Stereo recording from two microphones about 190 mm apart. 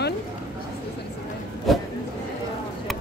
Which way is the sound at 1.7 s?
Centre (ahead or behind).